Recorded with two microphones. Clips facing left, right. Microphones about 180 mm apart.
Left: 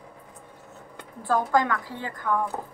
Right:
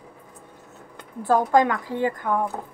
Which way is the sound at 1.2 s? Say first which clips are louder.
Right 4 dB; 20° right (ahead or behind).